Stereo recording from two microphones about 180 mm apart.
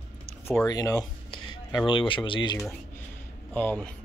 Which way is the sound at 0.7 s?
20° left (ahead or behind).